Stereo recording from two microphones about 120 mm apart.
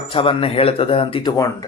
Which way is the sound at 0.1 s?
50° left (ahead or behind).